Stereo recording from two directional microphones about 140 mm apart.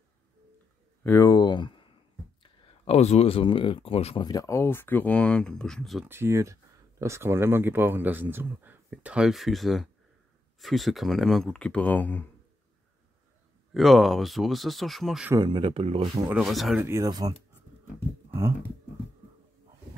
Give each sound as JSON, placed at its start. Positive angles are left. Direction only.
{"t": 1.0, "sound": "speech", "side_deg": 20}
{"t": 4.3, "sound": "speech", "side_deg": 25}
{"t": 6.0, "sound": "speech", "side_deg": -15}
{"t": 13.7, "sound": "speech", "side_deg": 0}
{"t": 15.3, "sound": "speech", "side_deg": -35}
{"t": 16.3, "sound": "speech", "side_deg": 0}
{"t": 16.8, "sound": "speech", "side_deg": -25}